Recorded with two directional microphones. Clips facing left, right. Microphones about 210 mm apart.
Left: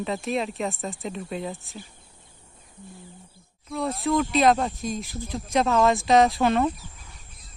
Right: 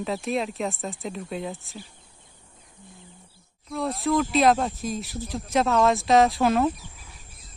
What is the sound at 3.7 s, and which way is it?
Speech, centre (ahead or behind).